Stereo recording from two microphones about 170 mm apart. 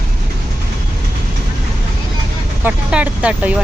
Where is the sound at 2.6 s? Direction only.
5° right (ahead or behind).